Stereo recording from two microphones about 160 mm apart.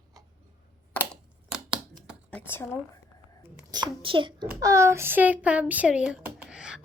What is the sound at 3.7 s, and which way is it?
Speech, 30° right (ahead or behind).